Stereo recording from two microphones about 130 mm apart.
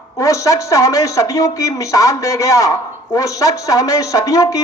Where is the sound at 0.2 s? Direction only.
25° left (ahead or behind).